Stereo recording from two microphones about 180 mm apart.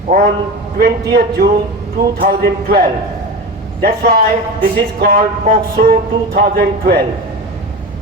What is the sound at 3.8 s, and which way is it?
A man's voice, 55° right (ahead or behind).